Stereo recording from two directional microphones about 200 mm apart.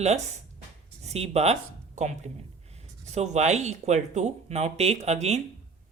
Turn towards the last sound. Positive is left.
turn(degrees=-35)  # may be behind; listen again after turning